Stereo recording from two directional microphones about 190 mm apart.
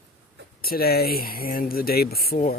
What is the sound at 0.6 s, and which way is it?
Speech, 50° left (ahead or behind).